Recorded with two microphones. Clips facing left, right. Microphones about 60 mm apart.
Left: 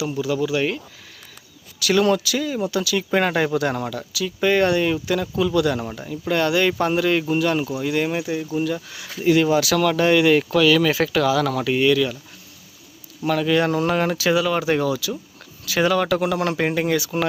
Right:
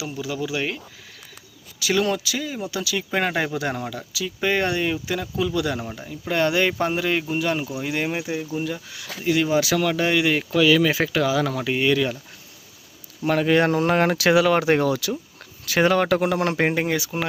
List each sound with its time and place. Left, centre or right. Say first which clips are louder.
0.2 s speech: left 5 dB; centre
1.8 s speech: left 4 dB; centre
6.3 s speech: left 1 dB; right
9.2 s speech: left 4 dB; centre
9.5 s speech: left 2 dB; right
9.7 s speech: left 4 dB; centre
13.2 s speech: right 1 dB; right
14.0 s speech: right 2 dB; right
15.6 s speech: even; right; by 17.1 s centre